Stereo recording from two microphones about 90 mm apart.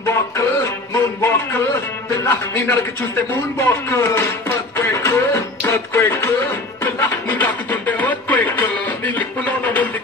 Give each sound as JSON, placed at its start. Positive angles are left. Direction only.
{"t": 0.0, "sound": "music", "side_deg": 30}
{"t": 1.2, "sound": "a man's voice", "side_deg": 25}
{"t": 3.5, "sound": "music", "side_deg": 30}